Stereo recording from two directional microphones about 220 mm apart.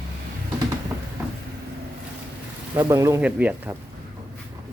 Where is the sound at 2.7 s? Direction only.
15° right (ahead or behind).